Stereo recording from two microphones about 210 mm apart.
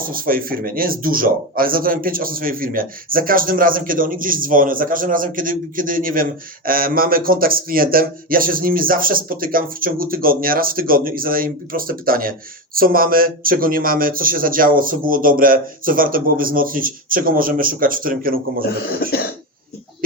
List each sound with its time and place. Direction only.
0.0 s speech: 45° right (ahead or behind)